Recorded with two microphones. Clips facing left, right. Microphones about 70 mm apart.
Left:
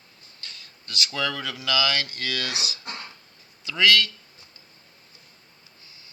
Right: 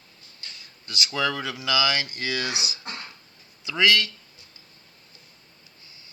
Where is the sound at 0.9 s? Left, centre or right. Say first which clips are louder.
Right 2 dB; centre.